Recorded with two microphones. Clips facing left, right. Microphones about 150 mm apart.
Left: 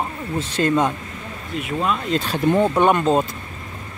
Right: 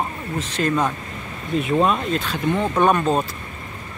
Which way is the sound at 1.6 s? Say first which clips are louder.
Right 4 dB; 30° right (ahead or behind).